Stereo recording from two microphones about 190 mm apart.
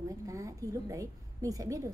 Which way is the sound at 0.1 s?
15° right (ahead or behind).